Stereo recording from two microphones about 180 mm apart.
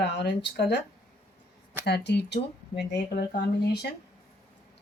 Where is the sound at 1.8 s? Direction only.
65° left (ahead or behind).